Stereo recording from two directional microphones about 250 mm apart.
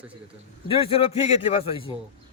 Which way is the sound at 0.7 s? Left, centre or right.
Left.